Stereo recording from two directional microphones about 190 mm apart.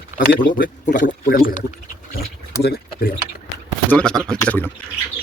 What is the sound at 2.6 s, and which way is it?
Speech, 50° left (ahead or behind).